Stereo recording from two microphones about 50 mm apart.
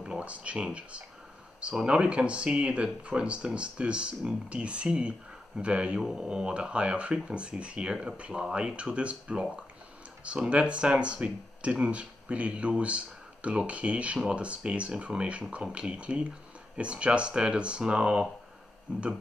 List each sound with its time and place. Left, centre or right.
0.0 s speech: right
1.9 s speech: centre